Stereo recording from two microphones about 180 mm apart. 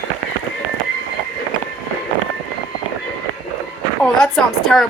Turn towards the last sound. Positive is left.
turn(degrees=0)  # may be behind; listen again after turning